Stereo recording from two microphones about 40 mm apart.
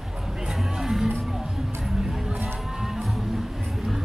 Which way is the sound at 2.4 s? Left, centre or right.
Centre.